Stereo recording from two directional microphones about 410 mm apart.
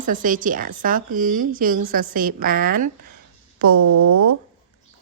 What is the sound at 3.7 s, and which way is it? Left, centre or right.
Speech, right.